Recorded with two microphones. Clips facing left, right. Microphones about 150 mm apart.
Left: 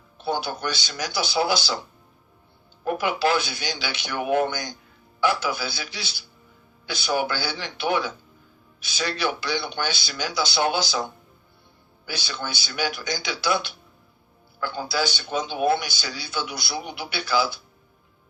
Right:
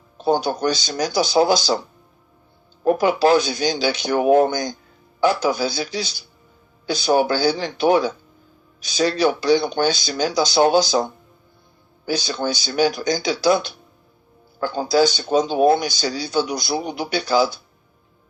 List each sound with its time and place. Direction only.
0.2 s speech: 40° right (ahead or behind)
2.8 s speech: 40° right (ahead or behind)